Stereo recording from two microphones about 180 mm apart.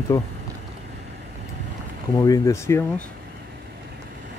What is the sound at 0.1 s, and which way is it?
Speech, 15° left (ahead or behind).